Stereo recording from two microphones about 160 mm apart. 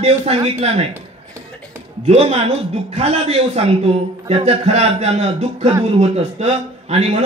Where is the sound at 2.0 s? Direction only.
40° right (ahead or behind).